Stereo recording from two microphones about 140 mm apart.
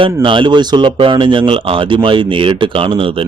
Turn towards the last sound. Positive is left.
turn(degrees=-40)  # may be behind; listen again after turning